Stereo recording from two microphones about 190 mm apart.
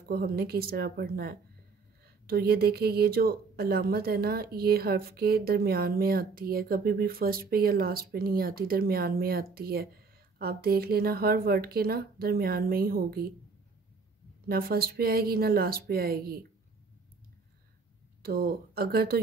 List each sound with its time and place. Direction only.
0.1 s speech: 55° right (ahead or behind)
14.5 s speech: 50° right (ahead or behind)
18.2 s speech: 55° right (ahead or behind)